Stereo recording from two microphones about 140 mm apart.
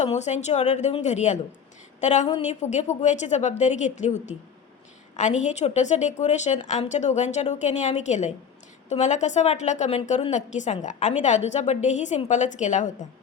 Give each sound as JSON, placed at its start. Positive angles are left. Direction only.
{"t": 0.0, "sound": "a woman's voice", "side_deg": 55}